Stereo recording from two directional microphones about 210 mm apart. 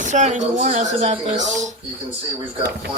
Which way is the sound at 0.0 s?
35° right (ahead or behind).